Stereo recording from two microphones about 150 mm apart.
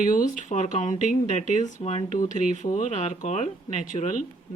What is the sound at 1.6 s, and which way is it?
Speech, 50° left (ahead or behind).